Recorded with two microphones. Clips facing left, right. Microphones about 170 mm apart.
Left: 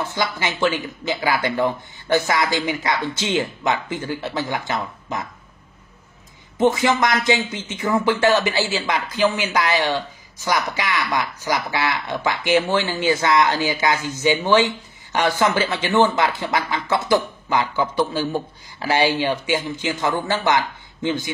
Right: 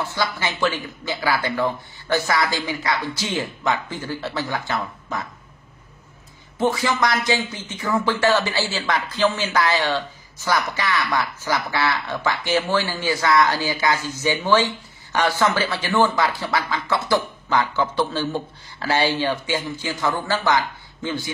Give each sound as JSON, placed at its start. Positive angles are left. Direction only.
{"t": 0.0, "sound": "speech", "side_deg": 20}
{"t": 6.6, "sound": "speech", "side_deg": 20}